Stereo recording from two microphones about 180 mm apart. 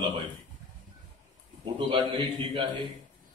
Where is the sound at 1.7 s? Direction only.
25° right (ahead or behind).